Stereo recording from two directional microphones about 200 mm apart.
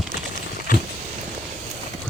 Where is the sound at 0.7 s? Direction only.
45° left (ahead or behind).